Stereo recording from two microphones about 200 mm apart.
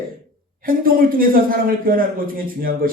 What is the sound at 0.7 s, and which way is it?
A man's voice, 45° right (ahead or behind).